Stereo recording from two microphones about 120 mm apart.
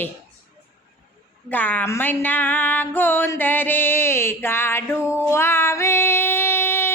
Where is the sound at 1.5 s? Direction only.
15° left (ahead or behind).